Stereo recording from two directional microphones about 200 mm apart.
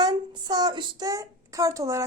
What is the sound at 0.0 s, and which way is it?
A woman's voice, 20° right (ahead or behind).